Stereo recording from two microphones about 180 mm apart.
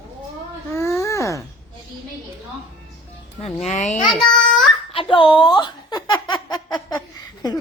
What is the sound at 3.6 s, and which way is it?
Speech, 40° left (ahead or behind).